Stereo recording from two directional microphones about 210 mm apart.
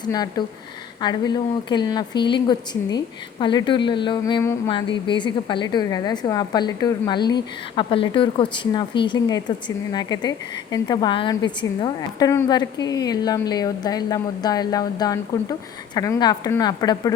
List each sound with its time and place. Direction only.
0.0 s speech: 20° left (ahead or behind)